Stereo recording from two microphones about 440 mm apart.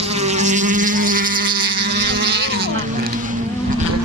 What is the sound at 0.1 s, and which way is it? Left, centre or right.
Insect, centre.